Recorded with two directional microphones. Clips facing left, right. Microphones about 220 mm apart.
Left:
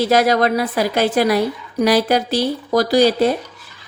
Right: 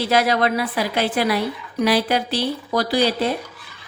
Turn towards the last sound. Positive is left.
turn(degrees=45)  # may be behind; listen again after turning